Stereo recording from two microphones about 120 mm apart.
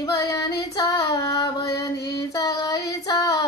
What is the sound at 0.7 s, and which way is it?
Child singing, 30° left (ahead or behind).